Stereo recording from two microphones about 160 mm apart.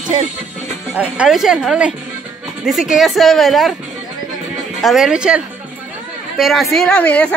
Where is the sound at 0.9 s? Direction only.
10° right (ahead or behind).